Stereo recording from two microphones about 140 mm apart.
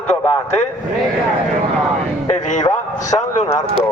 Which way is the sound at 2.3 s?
60° left (ahead or behind).